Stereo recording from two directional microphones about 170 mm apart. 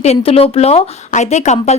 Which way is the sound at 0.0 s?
35° left (ahead or behind).